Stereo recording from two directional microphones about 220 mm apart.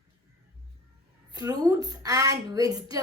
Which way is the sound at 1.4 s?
15° right (ahead or behind).